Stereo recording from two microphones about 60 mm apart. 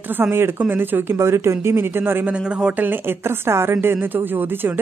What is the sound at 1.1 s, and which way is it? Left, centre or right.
A woman's voice, right.